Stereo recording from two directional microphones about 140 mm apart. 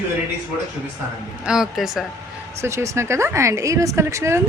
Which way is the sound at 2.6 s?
20° right (ahead or behind).